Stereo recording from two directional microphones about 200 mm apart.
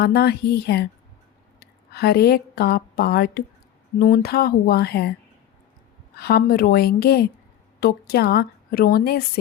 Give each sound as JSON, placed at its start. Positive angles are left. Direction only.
{"t": 0.0, "sound": "a woman's voice", "side_deg": 50}
{"t": 6.1, "sound": "a woman's voice", "side_deg": 50}